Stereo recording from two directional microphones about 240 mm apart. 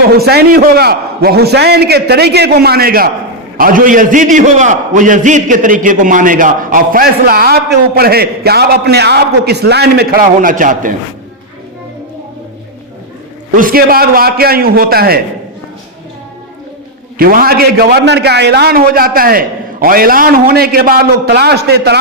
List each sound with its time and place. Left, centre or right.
0.2 s a man's voice: right
13.6 s a man's voice: right
17.2 s a man's voice: right